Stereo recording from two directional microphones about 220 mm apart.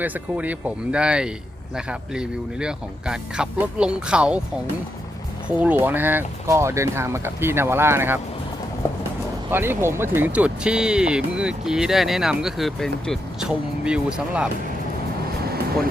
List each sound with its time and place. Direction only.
0.0 s speech: 5° right (ahead or behind)
5.5 s speech: 5° right (ahead or behind)
8.8 s clip-clop: 10° left (ahead or behind)
9.5 s speech: 10° right (ahead or behind)
15.4 s vehicle: 45° right (ahead or behind)